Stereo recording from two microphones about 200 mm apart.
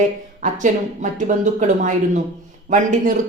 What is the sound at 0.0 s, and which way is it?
A woman's voice, 40° right (ahead or behind).